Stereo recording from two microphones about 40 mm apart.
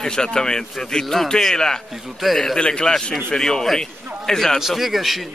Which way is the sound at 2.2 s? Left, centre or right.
Centre.